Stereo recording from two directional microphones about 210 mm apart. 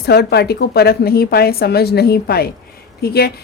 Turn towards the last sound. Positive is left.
turn(degrees=50)  # may be behind; listen again after turning